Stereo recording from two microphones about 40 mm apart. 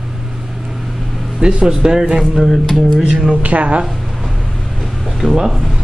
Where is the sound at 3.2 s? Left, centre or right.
Right.